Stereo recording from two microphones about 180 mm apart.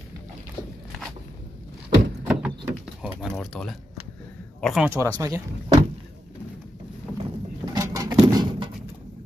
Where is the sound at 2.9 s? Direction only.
Centre (ahead or behind).